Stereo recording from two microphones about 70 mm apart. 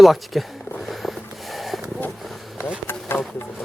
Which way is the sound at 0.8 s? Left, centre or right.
Centre.